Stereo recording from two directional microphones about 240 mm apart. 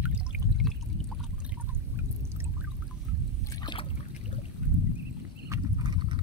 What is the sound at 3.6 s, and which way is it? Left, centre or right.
Boat, centre.